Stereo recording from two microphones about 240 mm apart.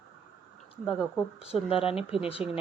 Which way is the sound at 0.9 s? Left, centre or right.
Centre.